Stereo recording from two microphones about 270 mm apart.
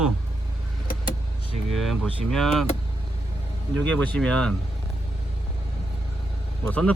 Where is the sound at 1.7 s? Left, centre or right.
Centre.